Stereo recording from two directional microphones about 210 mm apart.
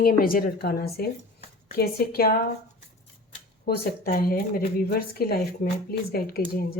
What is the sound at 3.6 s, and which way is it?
Speech, 45° left (ahead or behind).